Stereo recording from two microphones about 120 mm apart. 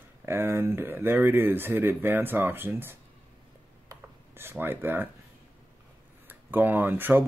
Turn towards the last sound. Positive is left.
turn(degrees=-15)  # may be behind; listen again after turning